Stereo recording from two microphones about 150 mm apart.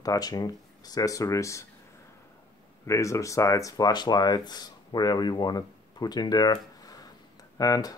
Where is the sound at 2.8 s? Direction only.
20° left (ahead or behind).